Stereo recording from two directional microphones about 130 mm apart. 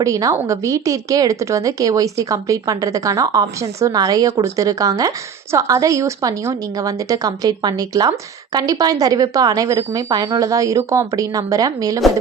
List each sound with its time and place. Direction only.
0.0 s a woman's voice: 25° right (ahead or behind)